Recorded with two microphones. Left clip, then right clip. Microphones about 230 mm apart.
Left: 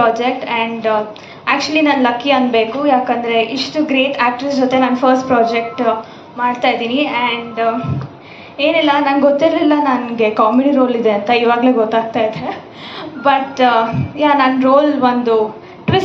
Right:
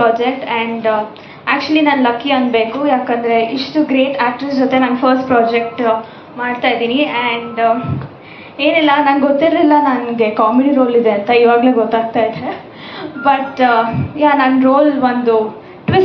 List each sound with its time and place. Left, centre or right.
0.0 s a woman's voice: left